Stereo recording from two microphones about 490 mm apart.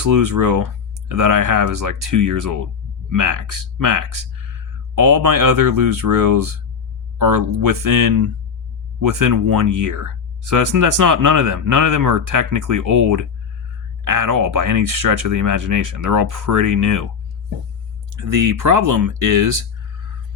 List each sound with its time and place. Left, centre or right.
0.0 s speech: right
18.2 s speech: right